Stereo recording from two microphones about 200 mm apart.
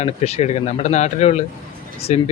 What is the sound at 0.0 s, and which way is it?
Speech, 30° left (ahead or behind).